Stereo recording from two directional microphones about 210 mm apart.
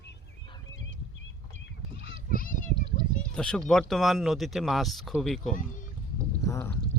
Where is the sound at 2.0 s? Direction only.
45° left (ahead or behind).